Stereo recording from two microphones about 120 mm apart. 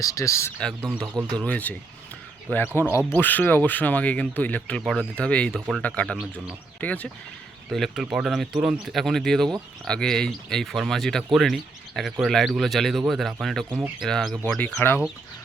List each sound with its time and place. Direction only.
0.0 s speech: 25° left (ahead or behind)
1.4 s speech: 10° left (ahead or behind)
6.1 s speech: 10° right (ahead or behind)
6.7 s speech: 10° left (ahead or behind)
7.7 s speech: centre (ahead or behind)
13.7 s speech: 15° right (ahead or behind)
14.0 s speech: centre (ahead or behind)
14.8 s speech: 20° left (ahead or behind)